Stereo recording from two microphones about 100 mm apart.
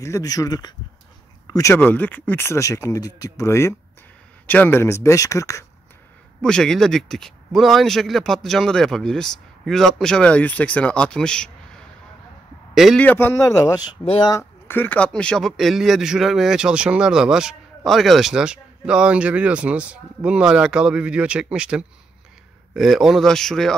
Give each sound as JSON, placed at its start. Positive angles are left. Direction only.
{"t": 0.0, "sound": "a man's voice", "side_deg": 35}
{"t": 1.8, "sound": "a man's voice", "side_deg": 20}
{"t": 4.5, "sound": "speech", "side_deg": 20}
{"t": 6.4, "sound": "speech", "side_deg": 5}
{"t": 12.9, "sound": "a man's voice", "side_deg": 15}
{"t": 14.7, "sound": "a man's voice", "side_deg": 20}